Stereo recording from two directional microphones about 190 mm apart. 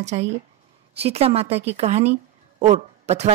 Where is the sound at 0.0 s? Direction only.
35° right (ahead or behind).